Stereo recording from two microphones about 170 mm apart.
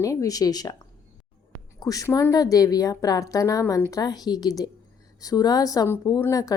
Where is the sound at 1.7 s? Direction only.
20° left (ahead or behind).